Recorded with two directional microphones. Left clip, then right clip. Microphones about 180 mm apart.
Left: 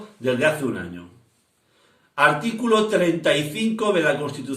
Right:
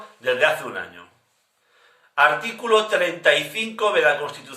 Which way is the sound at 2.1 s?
20° right (ahead or behind).